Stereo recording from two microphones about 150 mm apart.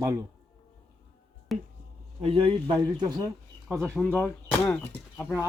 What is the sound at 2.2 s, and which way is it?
A man's voice, 40° right (ahead or behind).